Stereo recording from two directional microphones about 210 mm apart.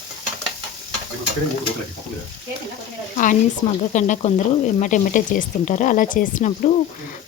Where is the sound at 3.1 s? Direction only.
35° left (ahead or behind).